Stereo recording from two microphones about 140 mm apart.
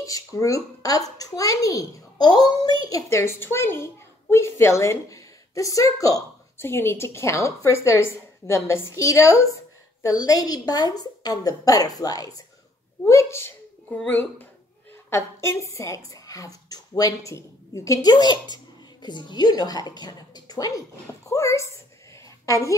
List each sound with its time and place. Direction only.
0.0 s a child's voice: 25° left (ahead or behind)
13.8 s a child's voice: 10° left (ahead or behind)